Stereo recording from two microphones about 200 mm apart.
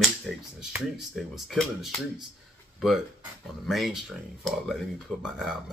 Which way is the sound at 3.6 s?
Centre (ahead or behind).